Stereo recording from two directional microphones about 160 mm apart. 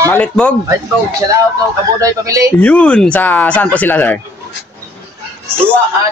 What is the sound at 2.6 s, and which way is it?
Speech, 10° left (ahead or behind).